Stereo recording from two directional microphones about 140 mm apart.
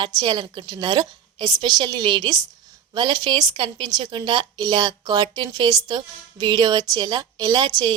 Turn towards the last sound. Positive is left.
turn(degrees=-30)  # may be behind; listen again after turning